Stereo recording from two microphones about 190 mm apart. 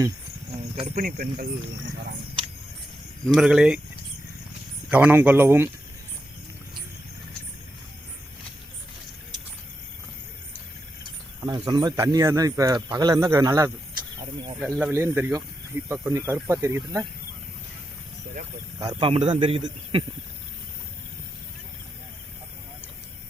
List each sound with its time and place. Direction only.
0.9 s speech: 50° right (ahead or behind)
3.2 s speech: centre (ahead or behind)
4.9 s speech: 10° right (ahead or behind)
11.4 s speech: 20° right (ahead or behind)
18.8 s a man's voice: 25° right (ahead or behind)